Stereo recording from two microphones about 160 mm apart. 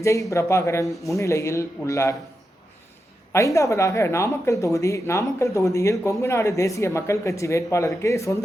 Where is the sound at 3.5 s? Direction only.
20° left (ahead or behind).